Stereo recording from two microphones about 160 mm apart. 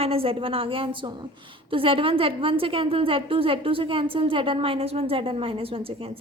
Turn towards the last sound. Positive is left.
turn(degrees=-35)  # may be behind; listen again after turning